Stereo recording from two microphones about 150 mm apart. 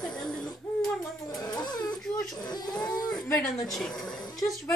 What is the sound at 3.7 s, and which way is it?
Speech, 5° left (ahead or behind).